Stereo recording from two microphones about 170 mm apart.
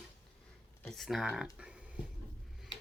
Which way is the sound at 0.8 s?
Centre (ahead or behind).